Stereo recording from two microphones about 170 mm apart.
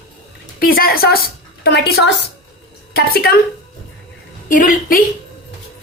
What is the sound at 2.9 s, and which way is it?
Speech, 65° left (ahead or behind).